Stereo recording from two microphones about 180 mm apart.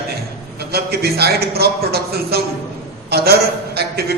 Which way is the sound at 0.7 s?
60° right (ahead or behind).